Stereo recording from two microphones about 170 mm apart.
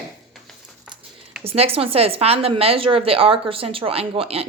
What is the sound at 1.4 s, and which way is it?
A woman's voice, 35° right (ahead or behind).